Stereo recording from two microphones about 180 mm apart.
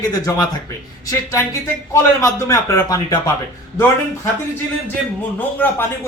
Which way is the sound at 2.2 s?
15° left (ahead or behind).